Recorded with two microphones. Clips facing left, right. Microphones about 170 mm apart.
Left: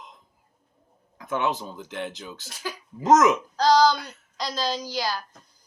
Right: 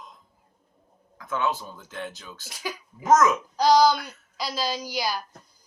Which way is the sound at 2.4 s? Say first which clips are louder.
Right 3 dB; 15° right (ahead or behind).